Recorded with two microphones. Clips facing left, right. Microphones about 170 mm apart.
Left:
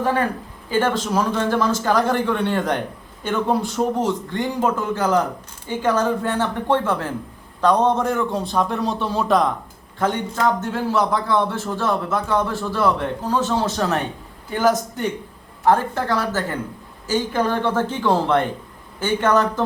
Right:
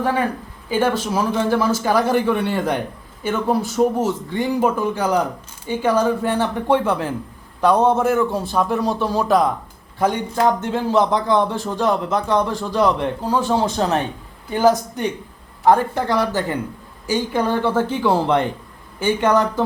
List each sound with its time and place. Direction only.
0.0 s a man's voice: 10° right (ahead or behind)
10.0 s speech: 15° right (ahead or behind)